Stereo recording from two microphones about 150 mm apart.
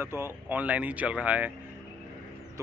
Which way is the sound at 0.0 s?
15° right (ahead or behind).